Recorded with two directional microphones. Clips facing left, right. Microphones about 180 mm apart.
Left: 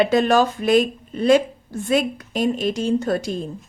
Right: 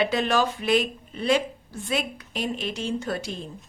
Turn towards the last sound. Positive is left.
turn(degrees=45)  # may be behind; listen again after turning